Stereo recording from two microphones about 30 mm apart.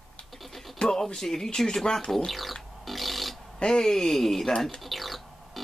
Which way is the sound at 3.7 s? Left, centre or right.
Centre.